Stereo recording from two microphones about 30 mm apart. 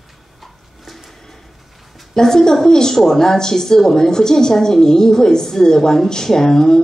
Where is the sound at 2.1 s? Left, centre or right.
Centre.